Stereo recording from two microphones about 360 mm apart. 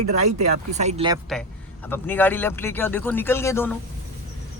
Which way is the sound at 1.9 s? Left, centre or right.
Centre.